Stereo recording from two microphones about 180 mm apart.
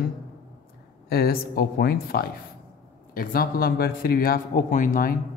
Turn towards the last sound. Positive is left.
turn(degrees=50)  # may be behind; listen again after turning